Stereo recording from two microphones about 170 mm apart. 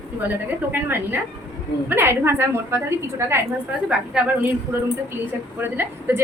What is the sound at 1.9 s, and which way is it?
A woman's voice, 15° right (ahead or behind).